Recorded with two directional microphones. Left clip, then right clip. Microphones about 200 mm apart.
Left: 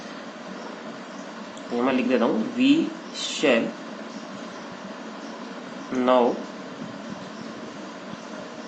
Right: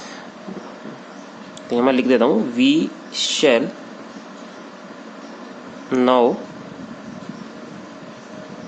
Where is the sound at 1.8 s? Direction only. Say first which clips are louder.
Right 7 dB; 55° right (ahead or behind).